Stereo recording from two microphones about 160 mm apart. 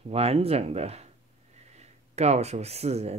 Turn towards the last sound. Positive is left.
turn(degrees=-40)  # may be behind; listen again after turning